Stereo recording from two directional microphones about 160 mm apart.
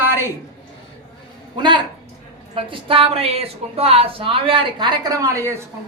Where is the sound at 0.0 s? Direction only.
15° right (ahead or behind).